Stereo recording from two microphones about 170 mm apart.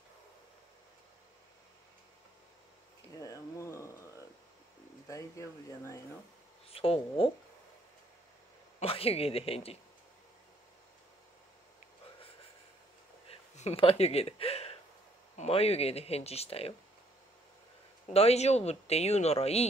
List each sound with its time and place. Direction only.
3.2 s a sound: 20° left (ahead or behind)
5.0 s speech: 20° left (ahead or behind)
6.7 s speech: 35° left (ahead or behind)
8.7 s speech: 35° left (ahead or behind)
13.3 s a sound: 35° left (ahead or behind)
15.3 s speech: 35° left (ahead or behind)
18.1 s speech: 40° left (ahead or behind)